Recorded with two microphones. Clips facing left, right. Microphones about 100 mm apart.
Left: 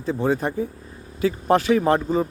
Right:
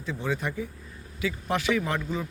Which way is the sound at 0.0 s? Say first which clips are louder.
Left 8 dB; 35° left (ahead or behind).